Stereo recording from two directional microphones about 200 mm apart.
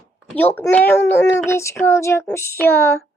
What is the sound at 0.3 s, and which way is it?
Speech, 10° left (ahead or behind).